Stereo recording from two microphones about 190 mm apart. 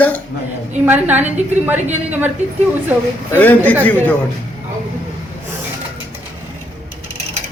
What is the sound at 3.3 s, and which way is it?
Speech, 10° left (ahead or behind).